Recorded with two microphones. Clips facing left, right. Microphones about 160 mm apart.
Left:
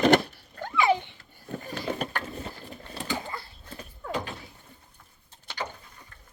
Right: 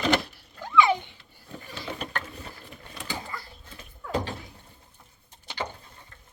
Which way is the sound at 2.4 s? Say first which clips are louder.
Left 4 dB; 35° left (ahead or behind).